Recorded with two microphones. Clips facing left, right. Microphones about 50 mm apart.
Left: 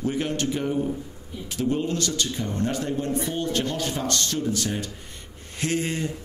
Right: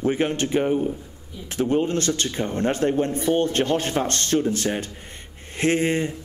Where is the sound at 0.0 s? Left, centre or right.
Right.